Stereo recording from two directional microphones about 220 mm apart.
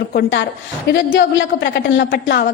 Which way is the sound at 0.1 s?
45° left (ahead or behind).